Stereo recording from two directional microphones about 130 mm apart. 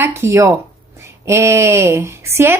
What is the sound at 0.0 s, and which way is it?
A woman's voice, 20° right (ahead or behind).